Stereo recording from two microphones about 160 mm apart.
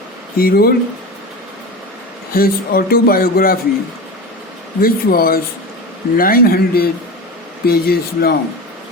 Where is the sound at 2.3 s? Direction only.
65° left (ahead or behind).